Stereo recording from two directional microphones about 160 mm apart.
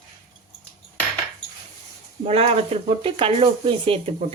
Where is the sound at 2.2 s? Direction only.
40° right (ahead or behind).